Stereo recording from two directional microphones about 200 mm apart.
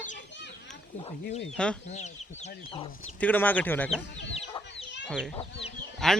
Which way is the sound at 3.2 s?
10° left (ahead or behind).